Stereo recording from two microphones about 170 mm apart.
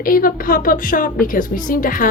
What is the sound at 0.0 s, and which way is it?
A woman's voice, 55° left (ahead or behind).